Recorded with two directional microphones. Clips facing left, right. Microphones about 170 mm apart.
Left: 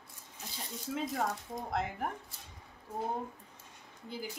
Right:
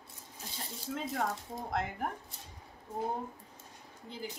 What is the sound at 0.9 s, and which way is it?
A woman's voice, centre (ahead or behind).